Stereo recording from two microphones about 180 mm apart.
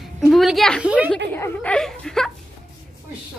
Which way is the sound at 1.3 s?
10° left (ahead or behind).